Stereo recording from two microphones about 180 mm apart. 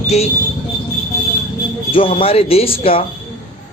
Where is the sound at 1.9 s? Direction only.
30° left (ahead or behind).